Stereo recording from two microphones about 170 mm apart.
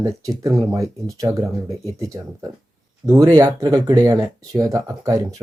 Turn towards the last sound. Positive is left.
turn(degrees=-20)  # may be behind; listen again after turning